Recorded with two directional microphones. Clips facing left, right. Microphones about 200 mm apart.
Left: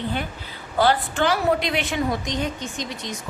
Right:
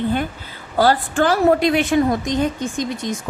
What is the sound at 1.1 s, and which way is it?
A woman's voice, 50° right (ahead or behind).